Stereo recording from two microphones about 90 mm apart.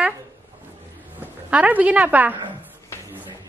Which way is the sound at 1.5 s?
15° right (ahead or behind).